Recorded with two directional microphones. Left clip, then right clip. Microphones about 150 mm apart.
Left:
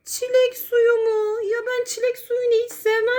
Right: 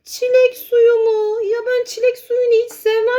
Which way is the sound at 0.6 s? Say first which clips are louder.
Right 5 dB; 25° right (ahead or behind).